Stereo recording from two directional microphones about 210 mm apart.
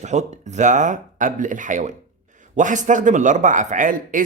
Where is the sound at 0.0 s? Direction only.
35° right (ahead or behind).